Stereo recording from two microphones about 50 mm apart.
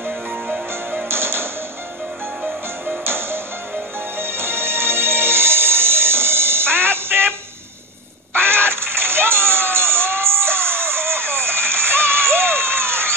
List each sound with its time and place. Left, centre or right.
1.0 s music: right
3.0 s music: right